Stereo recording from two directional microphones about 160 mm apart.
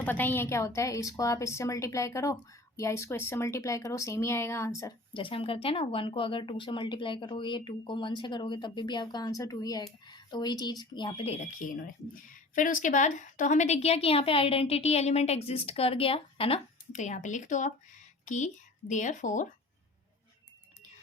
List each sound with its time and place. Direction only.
0.0 s a woman's voice: 10° left (ahead or behind)
5.1 s speech: 35° left (ahead or behind)
11.5 s speech: 55° left (ahead or behind)